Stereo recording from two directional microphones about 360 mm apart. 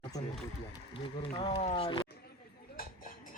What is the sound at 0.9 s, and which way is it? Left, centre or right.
Speech, centre.